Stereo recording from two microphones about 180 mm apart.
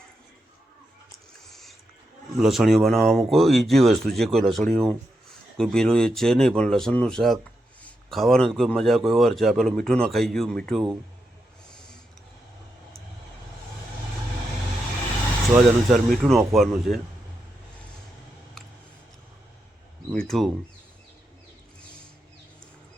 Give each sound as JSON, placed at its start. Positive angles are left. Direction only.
{"t": 1.5, "sound": "a sound", "side_deg": 0}
{"t": 2.4, "sound": "a man's voice", "side_deg": 0}
{"t": 15.5, "sound": "a man's voice", "side_deg": 0}
{"t": 20.2, "sound": "a man's voice", "side_deg": 0}